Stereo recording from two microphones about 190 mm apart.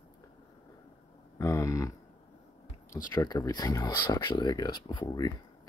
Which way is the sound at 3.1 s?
20° left (ahead or behind).